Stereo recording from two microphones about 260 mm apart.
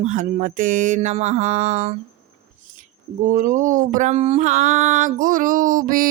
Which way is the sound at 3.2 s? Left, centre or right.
Right.